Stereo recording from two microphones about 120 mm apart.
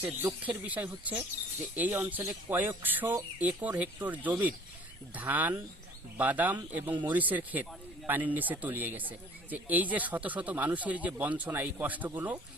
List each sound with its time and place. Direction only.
0.0 s speech: 15° right (ahead or behind)